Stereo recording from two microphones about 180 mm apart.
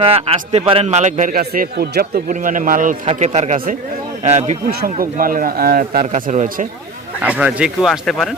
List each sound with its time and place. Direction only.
0.0 s a man's voice: 30° right (ahead or behind)
4.7 s a man's voice: 55° right (ahead or behind)
7.2 s speech: 5° right (ahead or behind)